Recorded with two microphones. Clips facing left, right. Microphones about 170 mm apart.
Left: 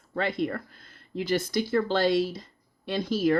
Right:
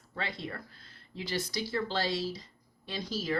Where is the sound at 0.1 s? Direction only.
50° left (ahead or behind).